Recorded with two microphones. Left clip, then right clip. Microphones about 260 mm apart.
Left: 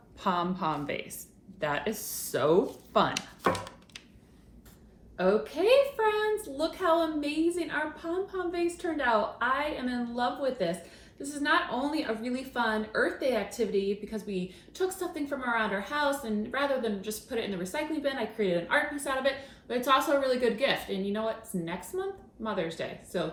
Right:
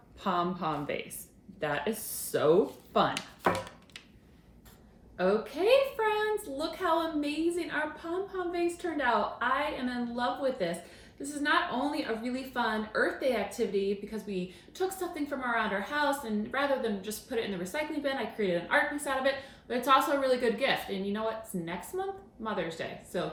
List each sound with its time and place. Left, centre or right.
0.2 s speech: centre
3.4 s a sound: centre
5.1 s a woman's voice: centre